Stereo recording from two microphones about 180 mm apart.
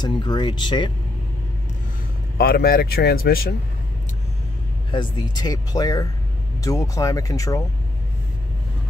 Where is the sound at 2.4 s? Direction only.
55° left (ahead or behind).